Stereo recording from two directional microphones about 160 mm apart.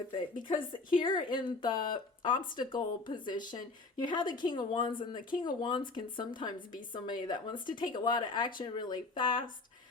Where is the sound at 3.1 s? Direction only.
30° left (ahead or behind).